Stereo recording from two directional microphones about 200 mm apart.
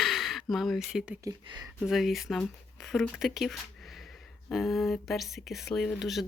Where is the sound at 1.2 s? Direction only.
20° right (ahead or behind).